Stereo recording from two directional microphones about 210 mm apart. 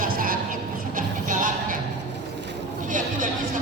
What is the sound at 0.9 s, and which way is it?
Music, 40° right (ahead or behind).